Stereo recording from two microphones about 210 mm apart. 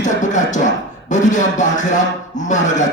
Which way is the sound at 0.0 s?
35° left (ahead or behind).